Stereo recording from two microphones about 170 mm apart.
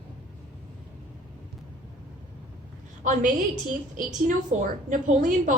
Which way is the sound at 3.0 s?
45° right (ahead or behind).